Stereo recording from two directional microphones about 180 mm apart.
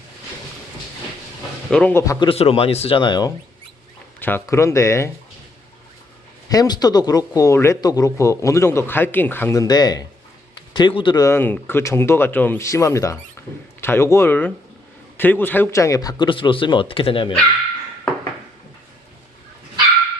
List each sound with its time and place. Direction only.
1.7 s speech: 10° left (ahead or behind)
4.2 s speech: 10° left (ahead or behind)
6.5 s speech: 20° left (ahead or behind)